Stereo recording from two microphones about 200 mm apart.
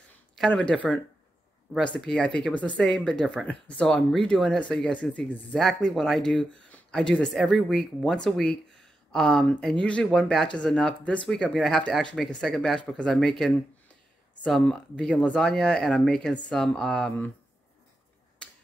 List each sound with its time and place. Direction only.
0.1 s speech: 5° left (ahead or behind)
18.4 s finger snapping: 5° left (ahead or behind)